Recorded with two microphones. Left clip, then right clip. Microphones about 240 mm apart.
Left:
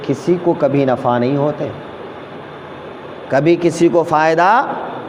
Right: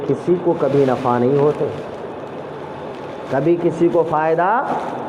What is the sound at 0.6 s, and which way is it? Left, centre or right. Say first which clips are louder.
Speech: left 2 dB; left.